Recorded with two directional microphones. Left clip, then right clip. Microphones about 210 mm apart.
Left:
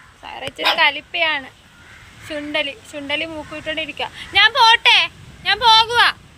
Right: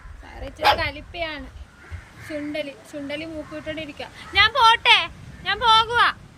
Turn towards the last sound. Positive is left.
turn(degrees=-10)  # may be behind; listen again after turning